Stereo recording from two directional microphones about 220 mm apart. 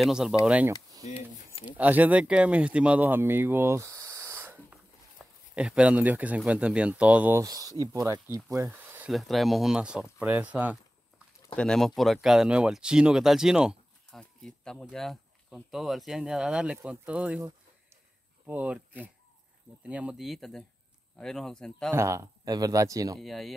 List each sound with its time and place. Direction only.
0.0 s speech: centre (ahead or behind)
1.0 s a sound: 25° left (ahead or behind)
1.7 s speech: 5° right (ahead or behind)
11.4 s speech: 5° left (ahead or behind)
18.5 s speech: 5° right (ahead or behind)
21.9 s speech: 15° right (ahead or behind)
23.1 s speech: centre (ahead or behind)